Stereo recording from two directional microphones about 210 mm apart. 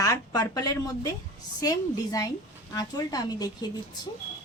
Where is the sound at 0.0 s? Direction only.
15° left (ahead or behind).